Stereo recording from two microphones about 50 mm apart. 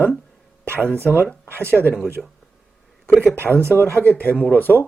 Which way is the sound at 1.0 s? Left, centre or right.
Right.